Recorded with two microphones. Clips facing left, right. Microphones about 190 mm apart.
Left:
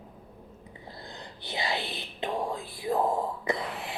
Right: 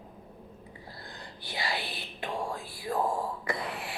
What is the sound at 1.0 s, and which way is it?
Whispering, 20° left (ahead or behind).